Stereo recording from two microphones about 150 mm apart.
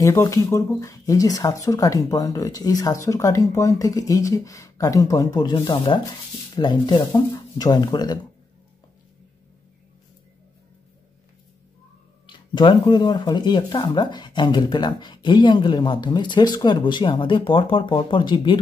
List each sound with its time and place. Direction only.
0.0 s speech: 20° left (ahead or behind)
12.3 s speech: 30° left (ahead or behind)